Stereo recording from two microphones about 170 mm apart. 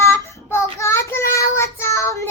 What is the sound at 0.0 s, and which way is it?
Child singing, 15° left (ahead or behind).